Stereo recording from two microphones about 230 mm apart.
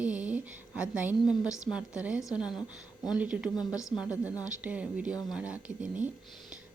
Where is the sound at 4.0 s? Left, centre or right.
Centre.